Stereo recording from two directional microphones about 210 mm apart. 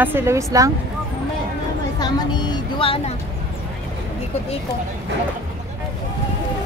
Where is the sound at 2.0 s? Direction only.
20° left (ahead or behind).